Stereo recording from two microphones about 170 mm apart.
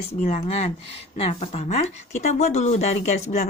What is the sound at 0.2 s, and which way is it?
Speech, 35° left (ahead or behind).